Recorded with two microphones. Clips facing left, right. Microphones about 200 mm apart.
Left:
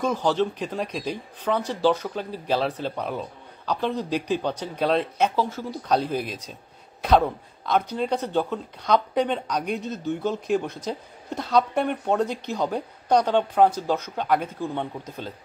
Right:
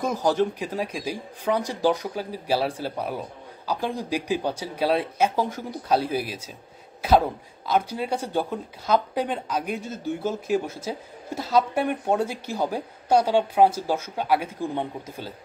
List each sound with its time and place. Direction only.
0.0 s speech: 10° right (ahead or behind)